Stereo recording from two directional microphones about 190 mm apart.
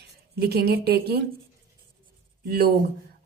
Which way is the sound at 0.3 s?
55° right (ahead or behind).